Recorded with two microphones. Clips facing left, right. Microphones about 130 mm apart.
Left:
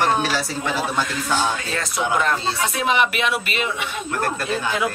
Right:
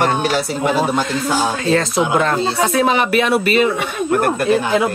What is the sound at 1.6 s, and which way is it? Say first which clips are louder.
Speech: right 9 dB; 30° right (ahead or behind).